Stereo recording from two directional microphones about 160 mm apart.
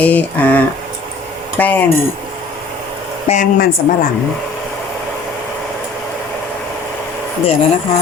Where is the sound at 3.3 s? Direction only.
60° left (ahead or behind).